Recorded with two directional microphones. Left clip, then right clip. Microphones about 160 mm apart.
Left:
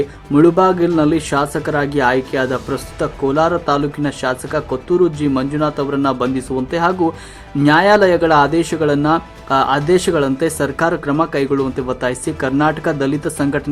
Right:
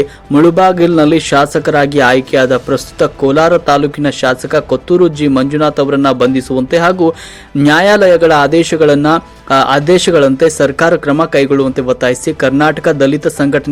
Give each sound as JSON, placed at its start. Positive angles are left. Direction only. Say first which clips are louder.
{"t": 0.3, "sound": "a man's voice", "louder": "right 4 dB", "side_deg": -15}